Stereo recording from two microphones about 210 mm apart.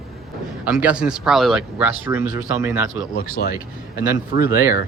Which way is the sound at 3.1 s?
40° left (ahead or behind).